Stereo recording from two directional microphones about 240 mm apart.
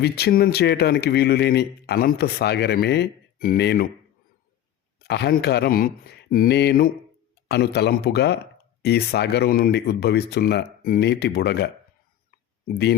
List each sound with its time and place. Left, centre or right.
0.0 s speech: left
4.9 s speech: left